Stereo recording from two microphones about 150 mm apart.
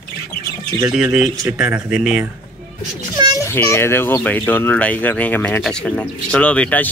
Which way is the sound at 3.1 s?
25° right (ahead or behind).